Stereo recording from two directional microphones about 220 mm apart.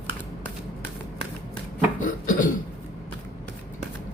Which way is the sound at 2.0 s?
35° left (ahead or behind).